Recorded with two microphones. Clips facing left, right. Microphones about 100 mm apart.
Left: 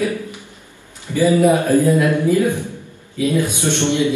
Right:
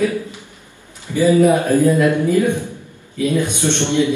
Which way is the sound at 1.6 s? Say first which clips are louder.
Even; 15° right (ahead or behind).